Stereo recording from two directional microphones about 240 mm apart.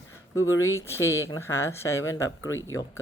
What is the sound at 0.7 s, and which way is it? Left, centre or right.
Speech, centre.